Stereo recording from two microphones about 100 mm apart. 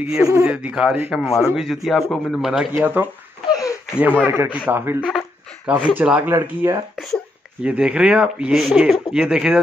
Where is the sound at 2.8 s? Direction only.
15° right (ahead or behind).